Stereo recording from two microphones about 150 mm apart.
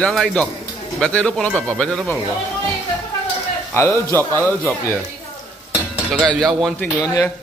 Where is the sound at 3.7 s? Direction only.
15° left (ahead or behind).